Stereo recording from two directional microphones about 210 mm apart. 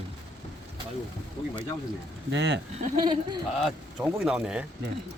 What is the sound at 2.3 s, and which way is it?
Speech, 55° right (ahead or behind).